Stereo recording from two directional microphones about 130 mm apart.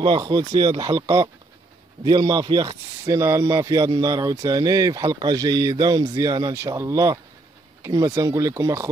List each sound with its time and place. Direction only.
0.0 s speech: 35° right (ahead or behind)
3.1 s speech: 20° right (ahead or behind)